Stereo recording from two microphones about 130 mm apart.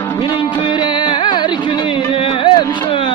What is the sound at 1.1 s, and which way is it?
Music, 35° left (ahead or behind).